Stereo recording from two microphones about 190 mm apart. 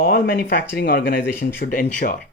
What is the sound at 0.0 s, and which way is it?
Speech, 50° left (ahead or behind).